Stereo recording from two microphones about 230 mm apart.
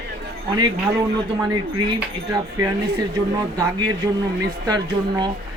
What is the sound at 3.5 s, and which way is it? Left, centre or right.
Speech, centre.